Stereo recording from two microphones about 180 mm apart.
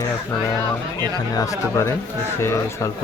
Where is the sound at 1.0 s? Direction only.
15° left (ahead or behind).